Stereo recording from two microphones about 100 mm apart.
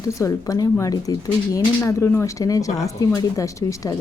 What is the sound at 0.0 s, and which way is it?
Speech, 30° left (ahead or behind).